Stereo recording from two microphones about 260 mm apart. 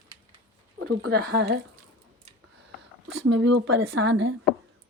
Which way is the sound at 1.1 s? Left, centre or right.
Right.